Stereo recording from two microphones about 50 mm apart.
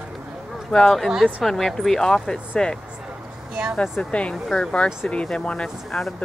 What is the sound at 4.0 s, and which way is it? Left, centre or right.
Speech, left.